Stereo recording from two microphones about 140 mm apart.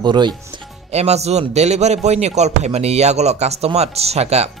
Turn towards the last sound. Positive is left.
turn(degrees=-50)  # may be behind; listen again after turning